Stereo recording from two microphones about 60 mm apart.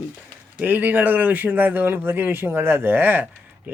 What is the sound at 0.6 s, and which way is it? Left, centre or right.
Speech, right.